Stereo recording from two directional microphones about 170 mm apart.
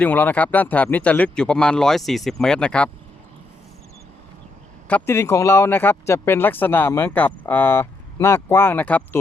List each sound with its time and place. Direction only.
0.0 s speech: 10° left (ahead or behind)
4.9 s speech: 10° left (ahead or behind)